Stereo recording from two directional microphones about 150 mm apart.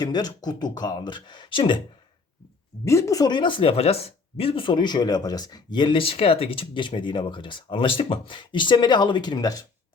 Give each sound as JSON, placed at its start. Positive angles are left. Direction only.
{"t": 0.0, "sound": "speech", "side_deg": 25}
{"t": 2.8, "sound": "speech", "side_deg": 20}